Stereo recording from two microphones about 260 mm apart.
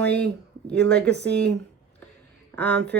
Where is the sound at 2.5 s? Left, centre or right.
Centre.